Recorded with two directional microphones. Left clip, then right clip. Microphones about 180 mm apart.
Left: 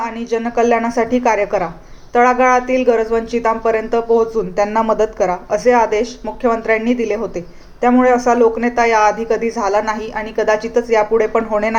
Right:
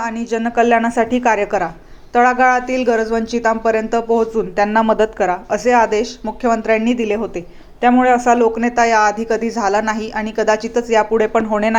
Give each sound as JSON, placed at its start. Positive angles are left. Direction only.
{"t": 0.0, "sound": "a woman's voice", "side_deg": -35}